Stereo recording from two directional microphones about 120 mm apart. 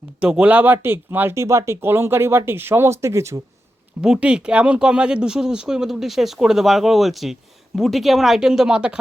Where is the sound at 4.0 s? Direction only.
5° right (ahead or behind).